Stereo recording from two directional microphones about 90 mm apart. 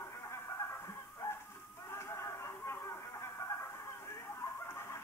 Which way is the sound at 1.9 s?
30° left (ahead or behind).